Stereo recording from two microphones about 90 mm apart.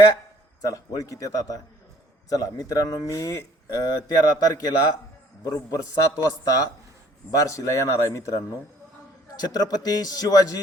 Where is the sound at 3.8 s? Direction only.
50° left (ahead or behind).